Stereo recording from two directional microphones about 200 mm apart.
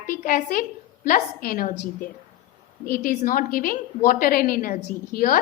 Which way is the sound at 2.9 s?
45° left (ahead or behind).